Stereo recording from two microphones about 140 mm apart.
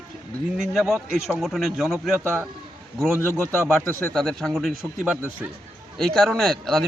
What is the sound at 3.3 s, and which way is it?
Speech, 20° left (ahead or behind).